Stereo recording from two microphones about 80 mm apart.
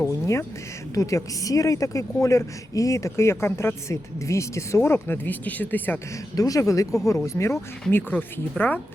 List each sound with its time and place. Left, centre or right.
0.0 s a sound: left
0.9 s a woman's voice: left
6.3 s a woman's voice: left
7.9 s speech: left